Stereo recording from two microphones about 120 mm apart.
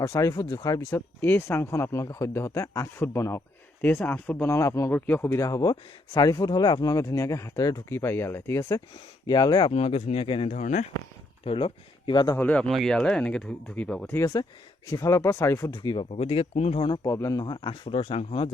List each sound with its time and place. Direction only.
0.0 s speech: 25° left (ahead or behind)
4.9 s speech: 15° left (ahead or behind)
5.4 s speech: 30° left (ahead or behind)
7.9 s speech: 20° left (ahead or behind)
9.2 s speech: 35° left (ahead or behind)
9.7 s speech: 60° left (ahead or behind); by 10.9 s 90° left
11.4 s speech: 45° left (ahead or behind)
12.4 s speech: 10° left (ahead or behind)
14.1 s speech: 25° left (ahead or behind)
16.0 s speech: 55° left (ahead or behind)
16.8 s speech: 40° left (ahead or behind)
17.1 s speech: 25° left (ahead or behind)
17.4 s speech: 40° left (ahead or behind)